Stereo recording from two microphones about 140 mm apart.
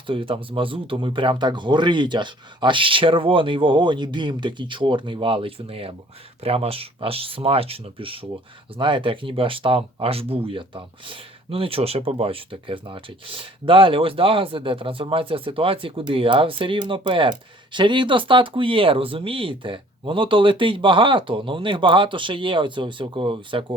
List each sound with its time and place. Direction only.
0.1 s speech: 40° right (ahead or behind)